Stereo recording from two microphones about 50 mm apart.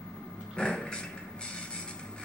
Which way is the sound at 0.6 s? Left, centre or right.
Centre.